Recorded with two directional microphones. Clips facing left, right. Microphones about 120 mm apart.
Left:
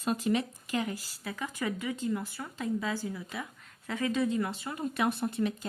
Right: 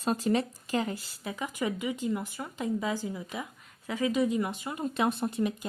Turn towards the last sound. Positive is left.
turn(degrees=-15)  # may be behind; listen again after turning